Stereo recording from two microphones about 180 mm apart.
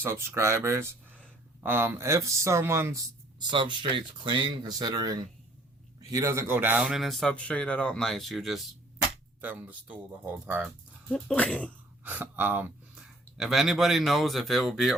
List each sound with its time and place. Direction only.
0.0 s speech: 15° right (ahead or behind)
3.4 s a man's voice: 25° right (ahead or behind); by 10.7 s 10° right (ahead or behind)
11.1 s speech: 5° left (ahead or behind)
12.0 s speech: 10° right (ahead or behind)